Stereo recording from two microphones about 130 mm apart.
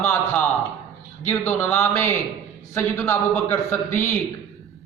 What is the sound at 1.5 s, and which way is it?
A man's voice, 15° left (ahead or behind).